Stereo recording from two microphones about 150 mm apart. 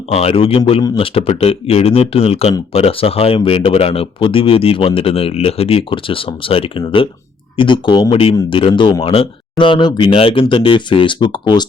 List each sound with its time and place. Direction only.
0.1 s speech: 40° left (ahead or behind)